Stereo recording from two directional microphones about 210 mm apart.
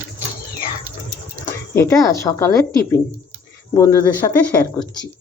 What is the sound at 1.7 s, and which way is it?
Speech, 15° left (ahead or behind).